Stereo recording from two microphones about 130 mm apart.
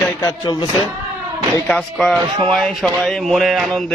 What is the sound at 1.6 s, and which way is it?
A man's voice, 5° left (ahead or behind).